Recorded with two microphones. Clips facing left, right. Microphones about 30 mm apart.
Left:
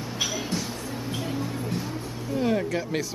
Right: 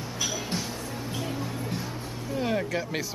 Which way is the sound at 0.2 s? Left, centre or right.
Centre.